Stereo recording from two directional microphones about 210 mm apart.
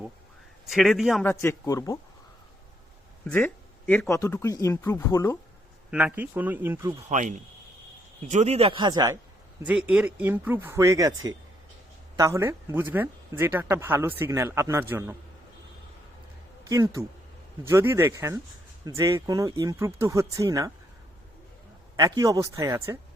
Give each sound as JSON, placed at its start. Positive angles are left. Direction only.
{"t": 0.7, "sound": "a man's voice", "side_deg": 0}
{"t": 1.2, "sound": "speech", "side_deg": 10}
{"t": 3.2, "sound": "speech", "side_deg": 5}
{"t": 5.9, "sound": "speech", "side_deg": -5}
{"t": 7.1, "sound": "speech", "side_deg": -35}
{"t": 9.6, "sound": "speech", "side_deg": -5}
{"t": 16.6, "sound": "speech", "side_deg": -15}
{"t": 21.9, "sound": "speech", "side_deg": -15}